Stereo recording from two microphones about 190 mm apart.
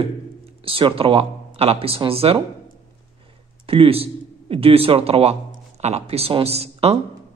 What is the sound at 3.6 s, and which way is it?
Speech, 30° right (ahead or behind).